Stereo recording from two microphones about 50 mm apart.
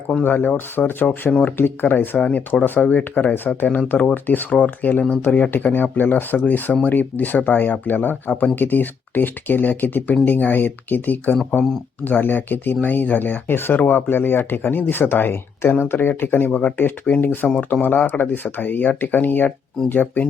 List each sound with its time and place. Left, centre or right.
0.3 s speech: left
1.3 s speech: left
1.5 s speech: left
2.2 s speech: left